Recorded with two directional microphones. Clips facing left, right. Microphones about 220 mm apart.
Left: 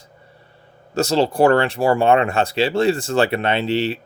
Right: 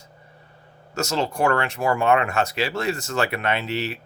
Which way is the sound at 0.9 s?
35° left (ahead or behind).